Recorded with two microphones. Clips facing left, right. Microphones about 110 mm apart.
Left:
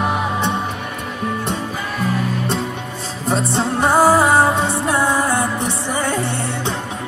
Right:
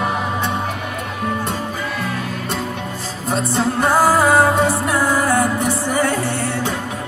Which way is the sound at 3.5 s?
25° left (ahead or behind).